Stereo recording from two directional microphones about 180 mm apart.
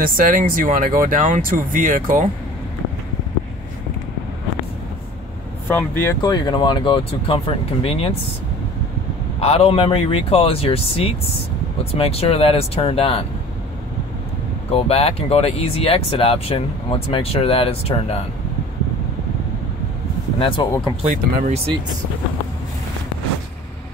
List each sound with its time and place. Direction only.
0.0 s speech: 50° right (ahead or behind)
5.7 s speech: 15° left (ahead or behind); by 8.1 s 30° left (ahead or behind)
9.4 s speech: 35° left (ahead or behind)
14.7 s speech: 35° left (ahead or behind)
20.3 s speech: 30° left (ahead or behind)
21.0 s speech: 45° right (ahead or behind)